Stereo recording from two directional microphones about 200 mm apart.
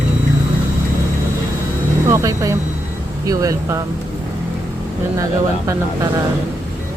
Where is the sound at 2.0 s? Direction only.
15° right (ahead or behind).